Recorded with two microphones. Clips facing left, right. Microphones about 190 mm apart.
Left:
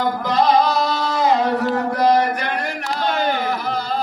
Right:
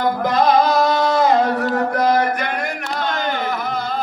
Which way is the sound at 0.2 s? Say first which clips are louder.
Even; 50° right (ahead or behind).